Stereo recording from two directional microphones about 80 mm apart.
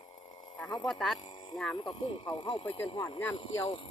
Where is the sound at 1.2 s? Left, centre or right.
Left.